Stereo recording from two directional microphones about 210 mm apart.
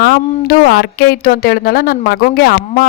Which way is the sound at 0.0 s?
45° left (ahead or behind).